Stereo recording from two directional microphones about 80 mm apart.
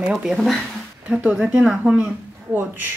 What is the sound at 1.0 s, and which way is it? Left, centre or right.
A woman's voice, centre.